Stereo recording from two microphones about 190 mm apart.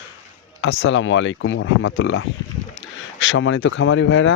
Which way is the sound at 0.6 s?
70° left (ahead or behind).